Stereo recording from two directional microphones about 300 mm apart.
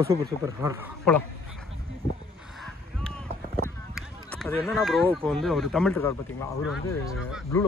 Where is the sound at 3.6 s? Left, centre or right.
Centre.